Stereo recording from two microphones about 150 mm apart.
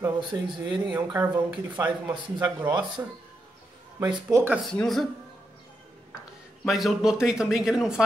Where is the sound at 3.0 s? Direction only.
15° right (ahead or behind).